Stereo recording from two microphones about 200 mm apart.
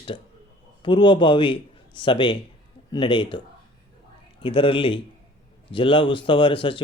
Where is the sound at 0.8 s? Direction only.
25° left (ahead or behind).